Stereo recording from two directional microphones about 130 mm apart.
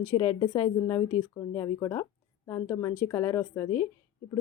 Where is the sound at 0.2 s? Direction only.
35° left (ahead or behind).